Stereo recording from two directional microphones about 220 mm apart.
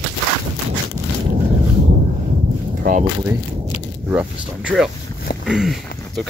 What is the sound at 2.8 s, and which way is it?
Speech, 35° right (ahead or behind).